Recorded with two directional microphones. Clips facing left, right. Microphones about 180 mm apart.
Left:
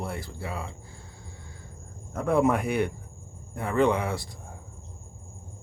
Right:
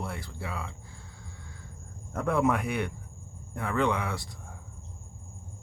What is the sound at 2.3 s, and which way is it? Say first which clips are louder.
Speech: left 4 dB; 35° left (ahead or behind).